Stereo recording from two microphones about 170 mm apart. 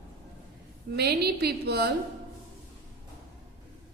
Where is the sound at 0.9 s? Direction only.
70° right (ahead or behind).